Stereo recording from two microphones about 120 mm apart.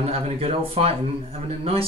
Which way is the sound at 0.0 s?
55° right (ahead or behind).